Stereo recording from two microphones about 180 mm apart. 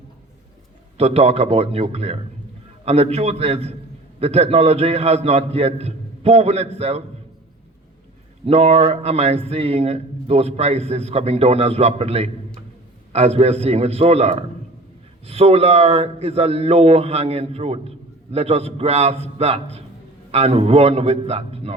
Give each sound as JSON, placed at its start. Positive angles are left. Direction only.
{"t": 0.9, "sound": "a man's voice", "side_deg": -35}
{"t": 8.4, "sound": "a man's voice", "side_deg": -35}